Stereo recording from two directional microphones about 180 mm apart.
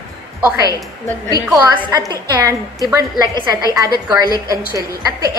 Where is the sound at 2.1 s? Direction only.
20° right (ahead or behind).